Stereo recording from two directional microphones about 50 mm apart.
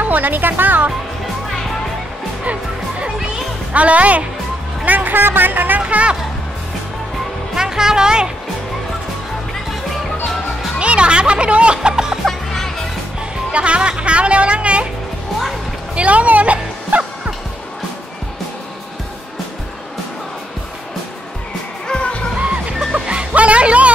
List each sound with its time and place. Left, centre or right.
0.0 s speech: right
2.4 s music: right
3.7 s speech: right
5.8 s speech: right
7.5 s speech: centre
10.8 s speech: right
12.3 s music: centre
13.5 s speech: right
15.9 s speech: right
21.8 s music: centre
22.9 s music: right